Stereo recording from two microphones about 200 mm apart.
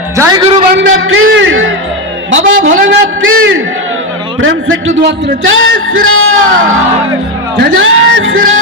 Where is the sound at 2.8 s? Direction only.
80° right.